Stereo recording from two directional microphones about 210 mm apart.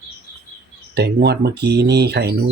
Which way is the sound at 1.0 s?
50° right (ahead or behind).